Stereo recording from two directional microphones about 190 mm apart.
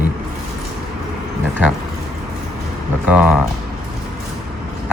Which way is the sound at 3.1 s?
5° right (ahead or behind).